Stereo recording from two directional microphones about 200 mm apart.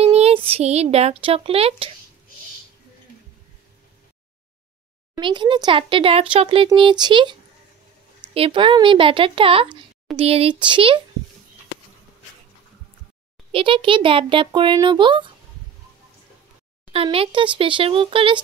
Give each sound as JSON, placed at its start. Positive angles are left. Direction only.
{"t": 0.0, "sound": "speech", "side_deg": -30}
{"t": 5.1, "sound": "a child's voice", "side_deg": -20}
{"t": 8.4, "sound": "a child's voice", "side_deg": -25}
{"t": 13.5, "sound": "a child's voice", "side_deg": -25}
{"t": 16.9, "sound": "a child's voice", "side_deg": -30}